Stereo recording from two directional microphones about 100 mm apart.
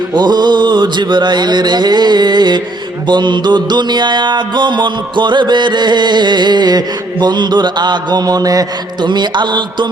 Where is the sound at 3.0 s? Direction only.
50° right (ahead or behind).